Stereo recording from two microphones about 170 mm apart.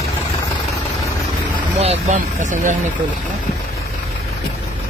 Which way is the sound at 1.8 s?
40° right (ahead or behind).